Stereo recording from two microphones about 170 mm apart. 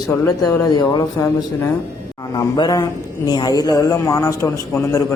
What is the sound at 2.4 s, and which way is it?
A man's voice, 25° left (ahead or behind).